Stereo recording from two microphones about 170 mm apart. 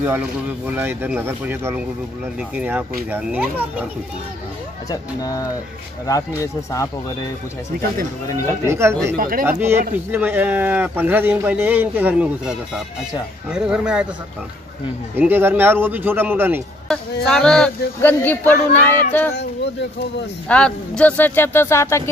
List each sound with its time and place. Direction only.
0.0 s a man's voice: 10° right (ahead or behind)
4.8 s speech: 20° left (ahead or behind)
8.6 s a man's voice: 15° right (ahead or behind)
9.1 s speech: 55° right (ahead or behind)
9.5 s a man's voice: 15° right (ahead or behind)
15.1 s a man's voice: 10° right (ahead or behind)
16.8 s speech: 5° left (ahead or behind)
19.3 s speech: 90° left
20.4 s speech: 5° left (ahead or behind)